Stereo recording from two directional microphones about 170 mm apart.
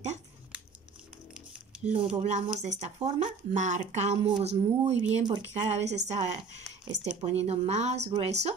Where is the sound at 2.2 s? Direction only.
45° right (ahead or behind).